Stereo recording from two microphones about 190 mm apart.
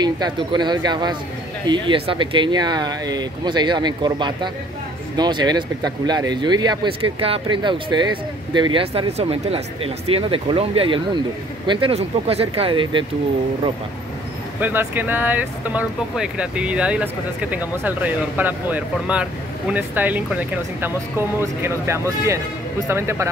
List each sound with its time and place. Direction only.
0.0 s speech: 25° right (ahead or behind)
14.6 s speech: 10° right (ahead or behind)